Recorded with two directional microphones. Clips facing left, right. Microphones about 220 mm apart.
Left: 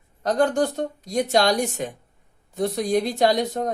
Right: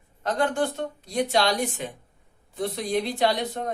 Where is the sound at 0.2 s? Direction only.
40° left (ahead or behind).